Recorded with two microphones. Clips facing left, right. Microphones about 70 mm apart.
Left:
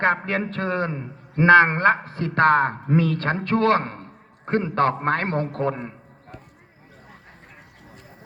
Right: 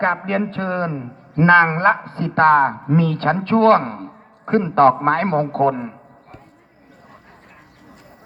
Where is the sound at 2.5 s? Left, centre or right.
Left.